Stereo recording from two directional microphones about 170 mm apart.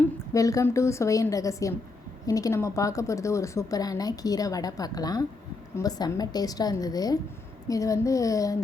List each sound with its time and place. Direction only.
0.3 s speech: 20° left (ahead or behind)